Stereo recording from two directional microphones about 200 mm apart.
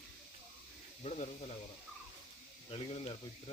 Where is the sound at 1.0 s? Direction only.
30° left (ahead or behind).